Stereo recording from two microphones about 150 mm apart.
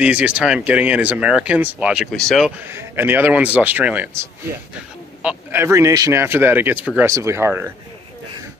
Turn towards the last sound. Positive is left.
turn(degrees=-15)  # may be behind; listen again after turning